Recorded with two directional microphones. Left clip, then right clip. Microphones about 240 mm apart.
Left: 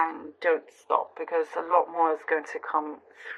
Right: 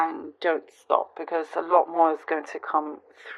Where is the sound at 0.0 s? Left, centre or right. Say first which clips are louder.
Right 1 dB; right.